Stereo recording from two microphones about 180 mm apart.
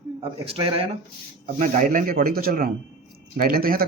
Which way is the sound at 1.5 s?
45° right (ahead or behind).